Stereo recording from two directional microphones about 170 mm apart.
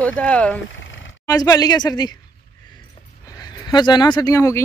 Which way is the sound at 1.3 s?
20° left (ahead or behind).